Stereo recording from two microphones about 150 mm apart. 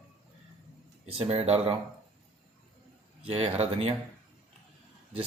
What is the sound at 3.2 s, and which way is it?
Speech, 45° right (ahead or behind).